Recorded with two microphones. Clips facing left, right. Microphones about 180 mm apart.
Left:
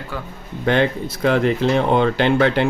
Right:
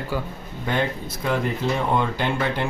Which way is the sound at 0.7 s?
75° left (ahead or behind).